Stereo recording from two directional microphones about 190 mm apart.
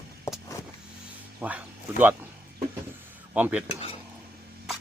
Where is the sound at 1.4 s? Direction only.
10° right (ahead or behind).